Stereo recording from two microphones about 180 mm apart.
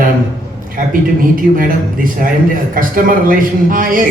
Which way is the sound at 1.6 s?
50° right (ahead or behind).